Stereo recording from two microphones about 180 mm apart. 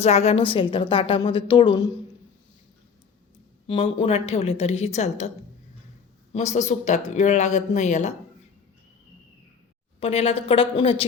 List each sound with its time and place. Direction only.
0.0 s a woman's voice: 35° left (ahead or behind)
3.7 s speech: 30° left (ahead or behind)
6.3 s speech: 40° left (ahead or behind)
10.0 s speech: 35° left (ahead or behind)